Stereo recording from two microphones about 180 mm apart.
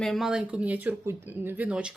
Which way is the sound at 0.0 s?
Centre (ahead or behind).